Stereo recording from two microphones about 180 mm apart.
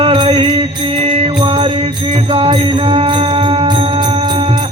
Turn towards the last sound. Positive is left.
turn(degrees=-30)  # may be behind; listen again after turning